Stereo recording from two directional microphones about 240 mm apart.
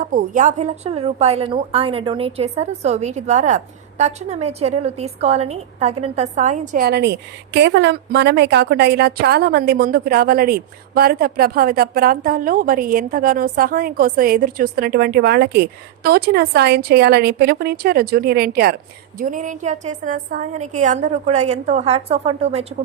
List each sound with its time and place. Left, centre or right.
0.0 s a woman's voice: right